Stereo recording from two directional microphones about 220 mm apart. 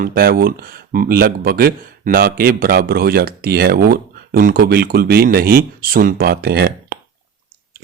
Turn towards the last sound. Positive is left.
turn(degrees=-45)  # may be behind; listen again after turning